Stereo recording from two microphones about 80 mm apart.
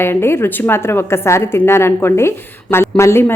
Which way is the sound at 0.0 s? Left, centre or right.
Left.